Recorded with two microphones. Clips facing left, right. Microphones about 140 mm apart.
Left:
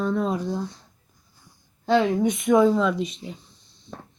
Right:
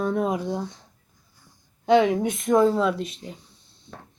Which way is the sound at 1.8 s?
15° right (ahead or behind).